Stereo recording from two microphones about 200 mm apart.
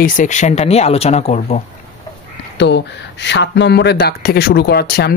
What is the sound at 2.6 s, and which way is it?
Speech, 60° left (ahead or behind).